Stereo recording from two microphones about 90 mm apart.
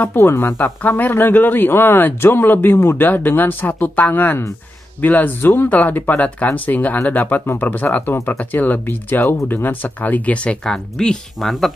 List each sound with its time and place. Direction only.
0.0 s speech: 25° left (ahead or behind); by 11.7 s 5° left (ahead or behind)